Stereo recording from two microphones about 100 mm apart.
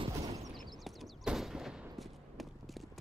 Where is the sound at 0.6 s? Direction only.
Centre (ahead or behind).